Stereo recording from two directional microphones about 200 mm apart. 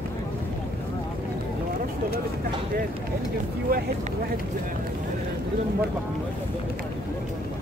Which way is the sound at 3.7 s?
45° right (ahead or behind).